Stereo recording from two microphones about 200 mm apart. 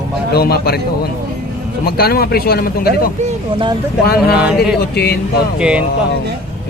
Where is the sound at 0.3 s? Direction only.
50° left (ahead or behind).